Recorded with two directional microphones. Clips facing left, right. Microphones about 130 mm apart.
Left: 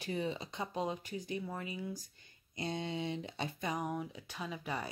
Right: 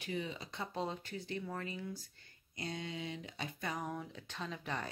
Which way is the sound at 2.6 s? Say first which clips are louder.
Left 4 dB; 25° left (ahead or behind).